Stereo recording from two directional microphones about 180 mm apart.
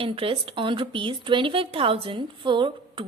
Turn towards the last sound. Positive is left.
turn(degrees=-30)  # may be behind; listen again after turning